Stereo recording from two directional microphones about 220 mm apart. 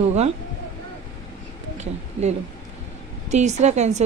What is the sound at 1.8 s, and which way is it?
A woman's voice, 30° right (ahead or behind).